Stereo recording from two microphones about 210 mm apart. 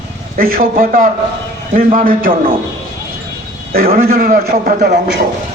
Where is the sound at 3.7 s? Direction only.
45° right (ahead or behind).